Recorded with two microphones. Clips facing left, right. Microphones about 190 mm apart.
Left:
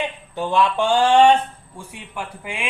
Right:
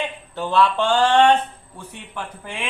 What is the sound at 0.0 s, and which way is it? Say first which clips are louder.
A man's voice: left 1 dB; 15° left (ahead or behind).